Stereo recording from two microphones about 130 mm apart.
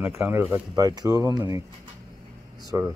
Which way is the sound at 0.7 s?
30° right (ahead or behind).